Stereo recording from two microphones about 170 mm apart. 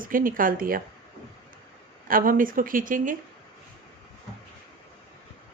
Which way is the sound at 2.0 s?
55° right (ahead or behind).